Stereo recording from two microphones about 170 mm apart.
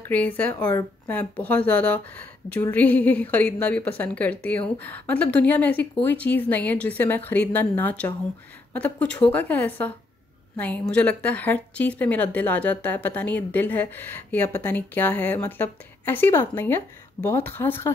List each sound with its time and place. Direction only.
0.1 s a woman's voice: 10° left (ahead or behind)